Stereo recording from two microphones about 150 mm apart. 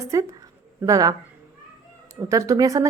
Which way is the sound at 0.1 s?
20° right (ahead or behind).